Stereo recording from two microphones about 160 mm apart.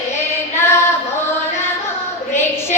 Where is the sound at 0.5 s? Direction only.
15° left (ahead or behind).